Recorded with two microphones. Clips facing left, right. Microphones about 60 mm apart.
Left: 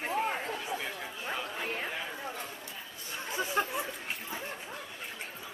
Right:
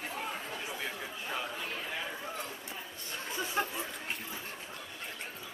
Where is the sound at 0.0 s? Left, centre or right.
Left.